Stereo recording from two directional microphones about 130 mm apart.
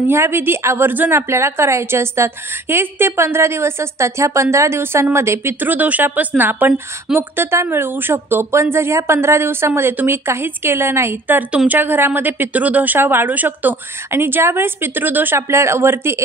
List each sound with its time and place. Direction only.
0.1 s a woman's voice: 20° right (ahead or behind)